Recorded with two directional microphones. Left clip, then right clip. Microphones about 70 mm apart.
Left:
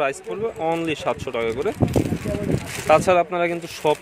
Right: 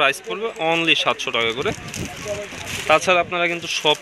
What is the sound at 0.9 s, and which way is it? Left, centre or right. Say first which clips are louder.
Speech: right 6 dB; centre.